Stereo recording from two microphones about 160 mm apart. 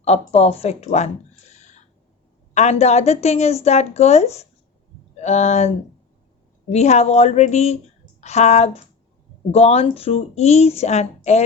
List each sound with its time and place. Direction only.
0.0 s a woman's voice: 40° left (ahead or behind)